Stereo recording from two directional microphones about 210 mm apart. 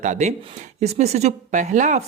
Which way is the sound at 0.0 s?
35° right (ahead or behind).